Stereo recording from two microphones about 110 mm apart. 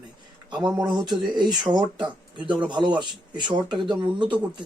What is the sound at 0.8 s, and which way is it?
Speech, 40° right (ahead or behind).